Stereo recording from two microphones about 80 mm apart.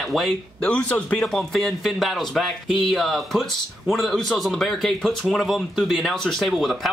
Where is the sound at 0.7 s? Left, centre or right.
Centre.